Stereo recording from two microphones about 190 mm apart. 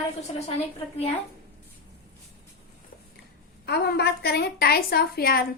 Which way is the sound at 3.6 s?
60° left (ahead or behind).